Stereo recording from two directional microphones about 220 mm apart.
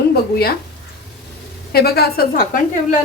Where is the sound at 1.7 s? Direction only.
45° left (ahead or behind).